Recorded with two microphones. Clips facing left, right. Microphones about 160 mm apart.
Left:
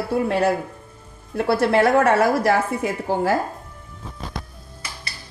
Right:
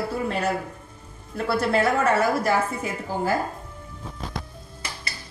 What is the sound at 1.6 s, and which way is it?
A woman's voice, 65° left (ahead or behind).